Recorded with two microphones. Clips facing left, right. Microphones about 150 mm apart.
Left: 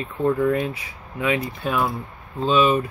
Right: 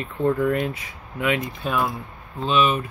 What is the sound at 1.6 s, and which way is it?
Speech, 5° left (ahead or behind).